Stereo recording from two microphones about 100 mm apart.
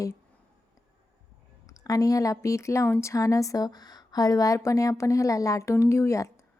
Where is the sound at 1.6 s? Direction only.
35° left (ahead or behind).